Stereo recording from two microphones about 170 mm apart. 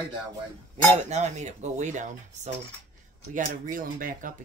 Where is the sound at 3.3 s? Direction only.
55° right (ahead or behind).